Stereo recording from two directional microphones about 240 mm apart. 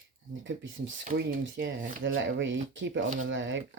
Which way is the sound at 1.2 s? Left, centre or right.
Right.